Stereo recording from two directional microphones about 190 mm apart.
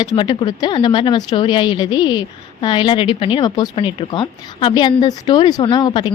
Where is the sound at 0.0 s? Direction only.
20° left (ahead or behind).